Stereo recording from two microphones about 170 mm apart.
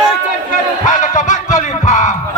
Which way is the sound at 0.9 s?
45° left (ahead or behind).